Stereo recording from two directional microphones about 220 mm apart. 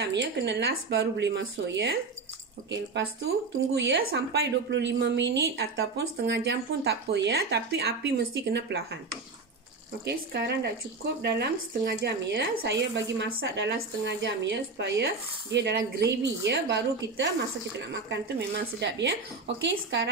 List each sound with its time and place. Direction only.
0.0 s speech: 50° right (ahead or behind)
10.0 s speech: 50° right (ahead or behind)